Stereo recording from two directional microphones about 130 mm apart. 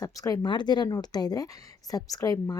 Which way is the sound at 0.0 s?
25° left (ahead or behind).